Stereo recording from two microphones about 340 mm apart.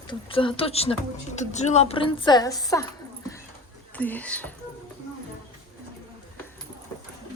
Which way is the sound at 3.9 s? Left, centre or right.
Centre.